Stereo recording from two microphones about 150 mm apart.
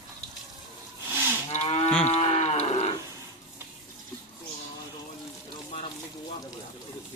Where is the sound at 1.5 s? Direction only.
45° left (ahead or behind).